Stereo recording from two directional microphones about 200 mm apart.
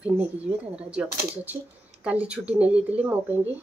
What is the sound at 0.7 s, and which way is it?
Speech, 5° right (ahead or behind).